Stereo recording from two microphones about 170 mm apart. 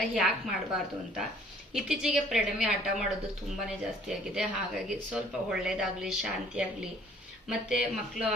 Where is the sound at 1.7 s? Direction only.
5° right (ahead or behind).